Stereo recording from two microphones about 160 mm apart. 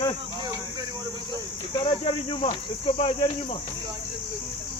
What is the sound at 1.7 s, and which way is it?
Speech, 30° left (ahead or behind).